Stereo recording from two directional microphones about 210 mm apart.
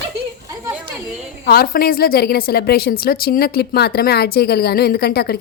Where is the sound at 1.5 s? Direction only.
45° left (ahead or behind).